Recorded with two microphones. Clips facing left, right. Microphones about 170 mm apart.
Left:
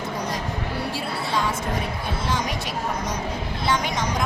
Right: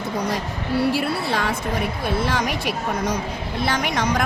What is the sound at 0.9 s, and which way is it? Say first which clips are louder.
A woman's voice: right 4 dB; 65° right (ahead or behind).